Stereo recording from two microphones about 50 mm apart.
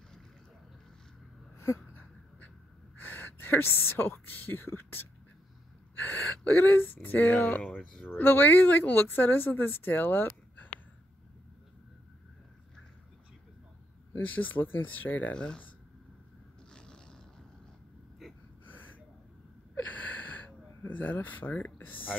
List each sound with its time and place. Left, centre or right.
3.0 s a woman's voice: left
5.9 s speech: left
14.1 s speech: left
15.3 s speech: centre
16.7 s a sound: centre
18.2 s gasp: centre
18.7 s gasp: left
19.7 s a sound: left